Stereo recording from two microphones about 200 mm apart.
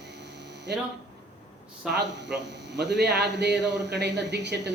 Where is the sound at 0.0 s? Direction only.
60° right (ahead or behind).